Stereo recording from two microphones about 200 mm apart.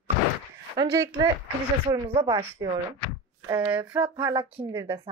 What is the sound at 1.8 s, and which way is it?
Speech, 30° right (ahead or behind).